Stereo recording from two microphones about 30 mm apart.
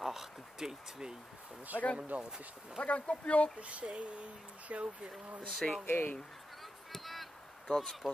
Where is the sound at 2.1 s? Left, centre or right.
Right.